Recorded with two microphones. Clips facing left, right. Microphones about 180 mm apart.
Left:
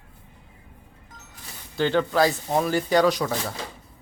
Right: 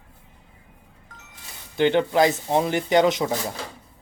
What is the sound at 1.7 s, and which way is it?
Speech, 20° right (ahead or behind).